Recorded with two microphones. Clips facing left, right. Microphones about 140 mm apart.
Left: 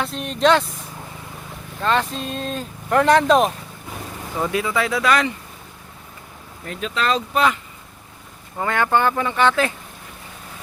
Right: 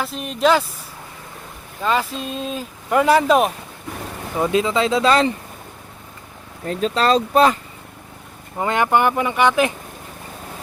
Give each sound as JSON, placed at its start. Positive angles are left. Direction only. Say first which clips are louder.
{"t": 0.0, "sound": "speech", "louder": "even", "side_deg": -5}
{"t": 1.8, "sound": "speech", "louder": "even", "side_deg": -5}
{"t": 4.4, "sound": "speech", "louder": "right 4 dB", "side_deg": -20}
{"t": 6.7, "sound": "speech", "louder": "right 5 dB", "side_deg": -35}
{"t": 8.5, "sound": "speech", "louder": "right 2 dB", "side_deg": -20}